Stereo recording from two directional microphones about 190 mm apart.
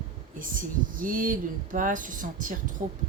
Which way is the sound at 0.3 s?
45° right (ahead or behind).